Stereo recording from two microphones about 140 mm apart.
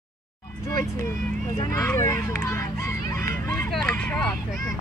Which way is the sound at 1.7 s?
20° left (ahead or behind).